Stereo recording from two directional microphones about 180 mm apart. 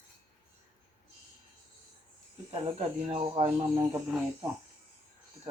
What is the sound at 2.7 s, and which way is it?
Speech, 40° right (ahead or behind).